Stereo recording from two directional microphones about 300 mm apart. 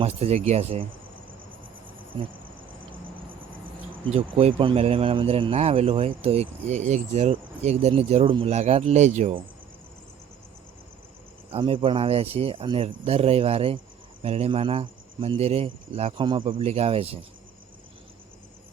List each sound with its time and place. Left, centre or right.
0.0 s speech: right
4.1 s speech: centre
11.5 s speech: centre